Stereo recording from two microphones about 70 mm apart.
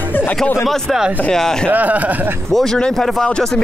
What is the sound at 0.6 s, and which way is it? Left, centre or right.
Speech, centre.